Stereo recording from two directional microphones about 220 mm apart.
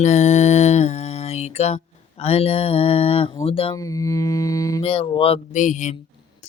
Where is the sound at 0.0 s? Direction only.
30° left (ahead or behind).